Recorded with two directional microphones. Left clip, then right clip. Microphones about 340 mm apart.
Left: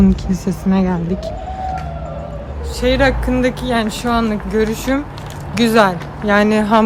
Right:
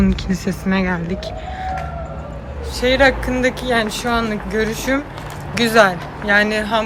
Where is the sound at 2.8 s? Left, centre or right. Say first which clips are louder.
Right 1 dB; centre.